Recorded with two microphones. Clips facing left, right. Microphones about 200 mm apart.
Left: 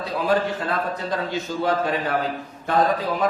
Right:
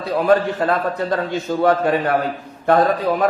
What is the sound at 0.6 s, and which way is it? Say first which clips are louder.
A man's voice: right 6 dB; 55° right (ahead or behind).